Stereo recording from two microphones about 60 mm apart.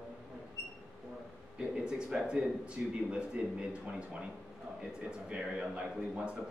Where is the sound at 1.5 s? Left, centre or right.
Centre.